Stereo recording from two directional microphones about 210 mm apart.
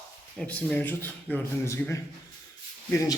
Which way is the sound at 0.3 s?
5° left (ahead or behind).